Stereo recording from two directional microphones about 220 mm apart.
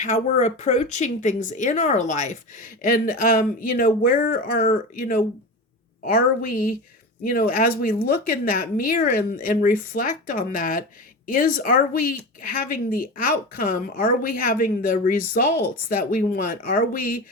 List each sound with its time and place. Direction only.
0.0 s speech: 35° left (ahead or behind)